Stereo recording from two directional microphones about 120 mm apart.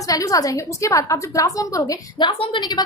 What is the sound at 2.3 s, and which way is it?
Speech, 45° left (ahead or behind).